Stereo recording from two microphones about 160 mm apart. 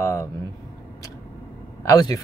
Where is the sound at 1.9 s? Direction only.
20° left (ahead or behind).